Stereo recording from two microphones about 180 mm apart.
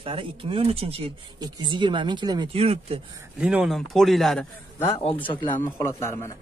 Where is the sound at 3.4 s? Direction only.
5° right (ahead or behind).